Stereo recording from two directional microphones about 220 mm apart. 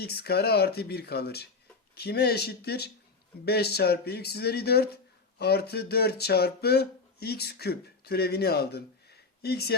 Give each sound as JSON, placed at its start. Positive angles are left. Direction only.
{"t": 0.0, "sound": "speech", "side_deg": 45}